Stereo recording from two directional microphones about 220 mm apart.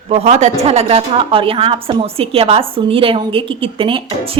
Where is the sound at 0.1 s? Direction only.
30° right (ahead or behind).